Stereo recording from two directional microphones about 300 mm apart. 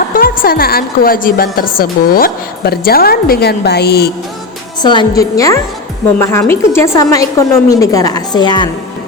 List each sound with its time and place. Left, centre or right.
0.2 s a woman's voice: left
4.8 s a woman's voice: centre